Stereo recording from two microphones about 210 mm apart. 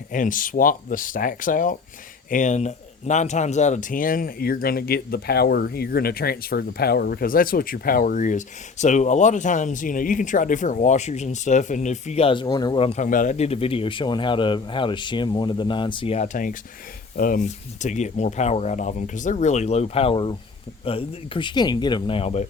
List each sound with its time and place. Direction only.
0.1 s speech: 40° left (ahead or behind)